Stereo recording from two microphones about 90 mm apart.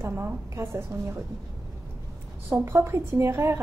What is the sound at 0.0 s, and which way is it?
Speech, 25° right (ahead or behind).